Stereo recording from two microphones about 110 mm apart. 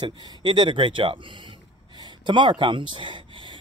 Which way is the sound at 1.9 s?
40° right (ahead or behind).